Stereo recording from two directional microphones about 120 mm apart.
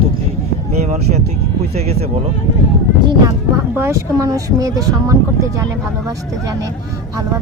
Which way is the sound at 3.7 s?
25° right (ahead or behind).